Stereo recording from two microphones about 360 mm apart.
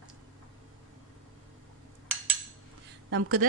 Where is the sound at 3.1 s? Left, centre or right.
Right.